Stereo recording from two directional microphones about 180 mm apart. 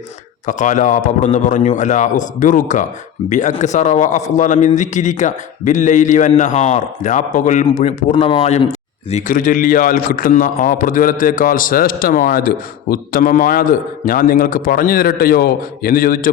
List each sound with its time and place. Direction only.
0.4 s a man's voice: 45° left (ahead or behind)